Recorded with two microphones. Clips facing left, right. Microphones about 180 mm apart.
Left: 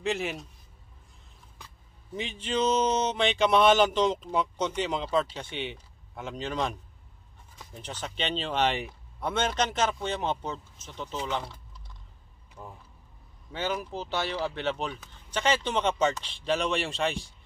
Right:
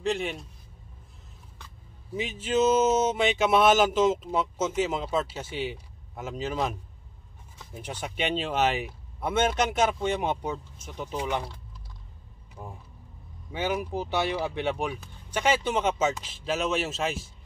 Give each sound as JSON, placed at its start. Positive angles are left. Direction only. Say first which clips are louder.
{"t": 0.0, "sound": "speech", "louder": "right 2 dB", "side_deg": 0}
{"t": 2.1, "sound": "speech", "louder": "right 4 dB", "side_deg": -5}
{"t": 12.6, "sound": "speech", "louder": "right 2 dB", "side_deg": -15}